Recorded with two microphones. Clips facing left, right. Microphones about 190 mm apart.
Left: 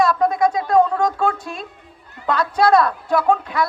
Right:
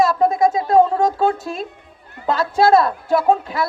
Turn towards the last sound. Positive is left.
turn(degrees=-25)  # may be behind; listen again after turning